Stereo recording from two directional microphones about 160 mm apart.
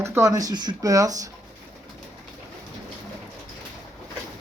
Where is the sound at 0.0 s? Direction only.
15° right (ahead or behind).